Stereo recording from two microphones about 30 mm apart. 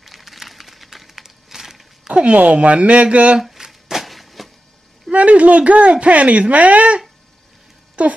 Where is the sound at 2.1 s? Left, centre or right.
Right.